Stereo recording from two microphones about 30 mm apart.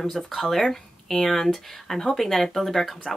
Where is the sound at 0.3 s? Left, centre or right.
Centre.